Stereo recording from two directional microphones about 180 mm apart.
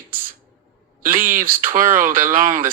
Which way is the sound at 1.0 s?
50° right (ahead or behind).